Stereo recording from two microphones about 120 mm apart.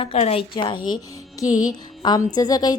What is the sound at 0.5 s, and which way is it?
Speech, 40° left (ahead or behind).